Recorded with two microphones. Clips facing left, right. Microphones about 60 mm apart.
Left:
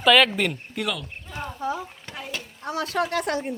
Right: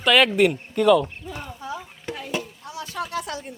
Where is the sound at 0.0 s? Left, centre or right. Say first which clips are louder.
Right 1 dB; centre.